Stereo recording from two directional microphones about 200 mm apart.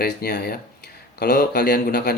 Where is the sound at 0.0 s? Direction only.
50° left (ahead or behind).